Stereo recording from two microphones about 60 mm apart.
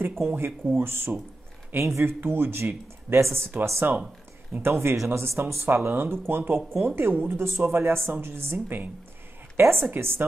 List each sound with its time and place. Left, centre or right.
0.2 s speech: right
1.8 s speech: right
2.1 s speech: right
4.9 s speech: right
5.7 s speech: right